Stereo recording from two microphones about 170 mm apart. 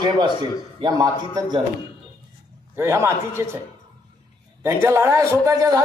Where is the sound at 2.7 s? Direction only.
15° right (ahead or behind).